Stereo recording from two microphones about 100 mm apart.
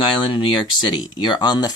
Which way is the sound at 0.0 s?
55° left (ahead or behind).